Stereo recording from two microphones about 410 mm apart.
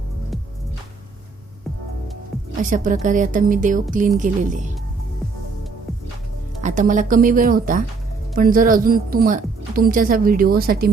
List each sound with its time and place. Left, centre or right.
2.6 s a woman's voice: centre
6.6 s a woman's voice: centre